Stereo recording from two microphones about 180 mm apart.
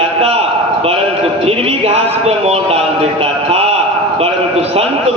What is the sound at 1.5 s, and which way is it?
Speech, 35° right (ahead or behind).